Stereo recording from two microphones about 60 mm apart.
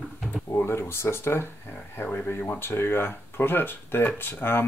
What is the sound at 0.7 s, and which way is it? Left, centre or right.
Speech, left.